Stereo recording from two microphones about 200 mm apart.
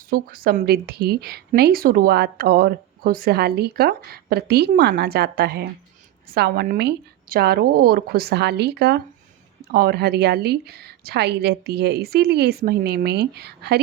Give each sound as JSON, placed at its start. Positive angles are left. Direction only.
{"t": 0.1, "sound": "a woman's voice", "side_deg": -45}